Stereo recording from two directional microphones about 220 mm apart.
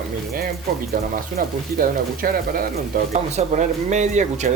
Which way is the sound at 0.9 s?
40° right (ahead or behind).